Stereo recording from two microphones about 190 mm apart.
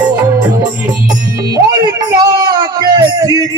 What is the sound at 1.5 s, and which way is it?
Music, 20° right (ahead or behind).